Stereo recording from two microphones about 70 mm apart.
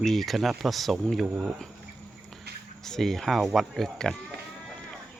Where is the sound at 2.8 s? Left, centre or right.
Centre.